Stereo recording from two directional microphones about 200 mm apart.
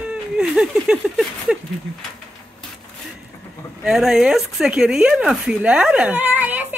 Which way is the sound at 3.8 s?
Centre (ahead or behind).